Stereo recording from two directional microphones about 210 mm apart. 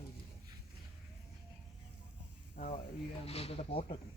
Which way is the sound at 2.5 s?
40° left (ahead or behind).